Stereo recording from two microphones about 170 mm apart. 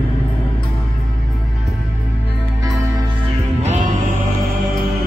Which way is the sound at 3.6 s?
40° right (ahead or behind).